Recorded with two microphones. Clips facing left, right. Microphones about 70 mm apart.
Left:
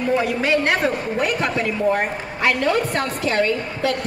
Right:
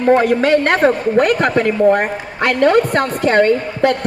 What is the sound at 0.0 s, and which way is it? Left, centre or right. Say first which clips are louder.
A man's voice: right 8 dB; right.